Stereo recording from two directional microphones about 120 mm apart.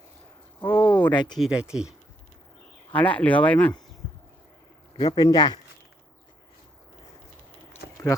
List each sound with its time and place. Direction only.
0.6 s a sound: 15° left (ahead or behind)
1.1 s speech: 40° left (ahead or behind)
1.4 s speech: 5° right (ahead or behind)
2.9 s speech: 10° left (ahead or behind)
4.9 s speech: 35° left (ahead or behind)